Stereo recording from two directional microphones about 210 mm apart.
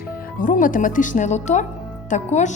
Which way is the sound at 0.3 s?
40° left (ahead or behind).